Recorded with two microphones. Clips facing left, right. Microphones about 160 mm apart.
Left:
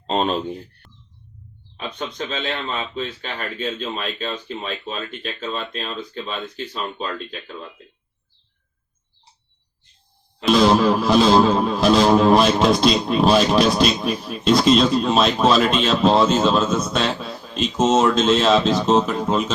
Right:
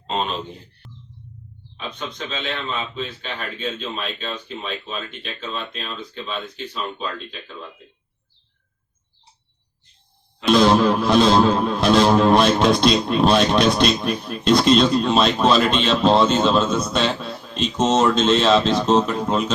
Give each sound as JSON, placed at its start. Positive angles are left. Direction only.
{"t": 0.1, "sound": "speech", "side_deg": 40}
{"t": 0.8, "sound": "music", "side_deg": 0}
{"t": 3.8, "sound": "speech", "side_deg": 45}
{"t": 10.4, "sound": "music", "side_deg": 0}